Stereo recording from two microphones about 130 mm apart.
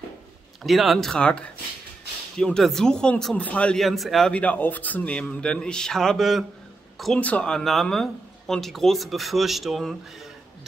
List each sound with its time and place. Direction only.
0.7 s speech: centre (ahead or behind)